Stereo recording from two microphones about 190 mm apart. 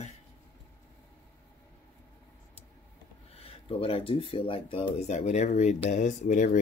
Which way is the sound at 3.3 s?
30° left (ahead or behind).